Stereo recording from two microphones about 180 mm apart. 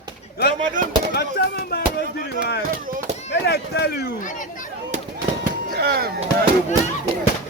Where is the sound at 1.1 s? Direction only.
65° left (ahead or behind).